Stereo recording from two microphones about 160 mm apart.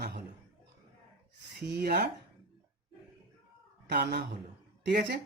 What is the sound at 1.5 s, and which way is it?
Speech, 90° right.